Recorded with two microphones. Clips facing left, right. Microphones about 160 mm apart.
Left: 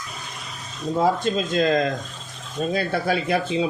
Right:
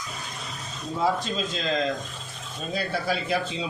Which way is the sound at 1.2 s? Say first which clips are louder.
Left 8 dB; 55° left (ahead or behind).